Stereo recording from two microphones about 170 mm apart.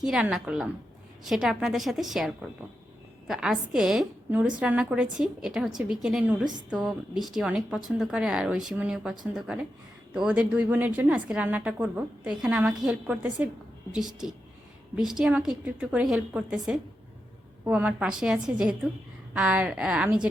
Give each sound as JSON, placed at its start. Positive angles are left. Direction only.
{"t": 0.0, "sound": "a woman's voice", "side_deg": -5}
{"t": 6.4, "sound": "a woman's voice", "side_deg": -25}
{"t": 6.8, "sound": "a woman's voice", "side_deg": 0}